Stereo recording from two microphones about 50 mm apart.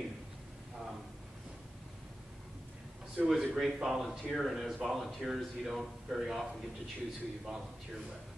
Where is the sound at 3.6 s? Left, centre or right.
Centre.